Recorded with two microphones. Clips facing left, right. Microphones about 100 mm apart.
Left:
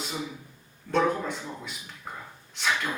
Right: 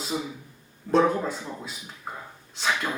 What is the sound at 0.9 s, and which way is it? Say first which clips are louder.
Speech: right 4 dB; 35° right (ahead or behind).